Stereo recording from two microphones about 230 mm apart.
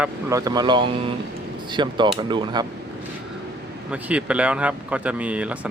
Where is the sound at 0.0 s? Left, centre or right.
Centre.